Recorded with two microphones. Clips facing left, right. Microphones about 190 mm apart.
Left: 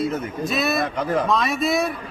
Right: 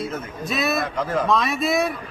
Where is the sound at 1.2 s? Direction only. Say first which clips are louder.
Even; centre (ahead or behind).